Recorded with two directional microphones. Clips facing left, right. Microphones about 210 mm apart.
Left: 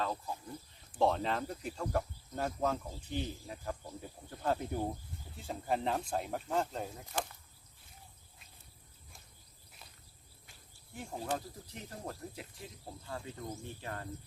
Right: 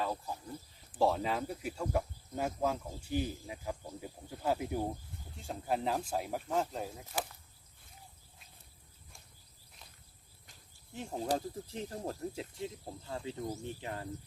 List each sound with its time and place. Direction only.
0.0 s speech: 10° right (ahead or behind)
11.3 s speech: 30° right (ahead or behind)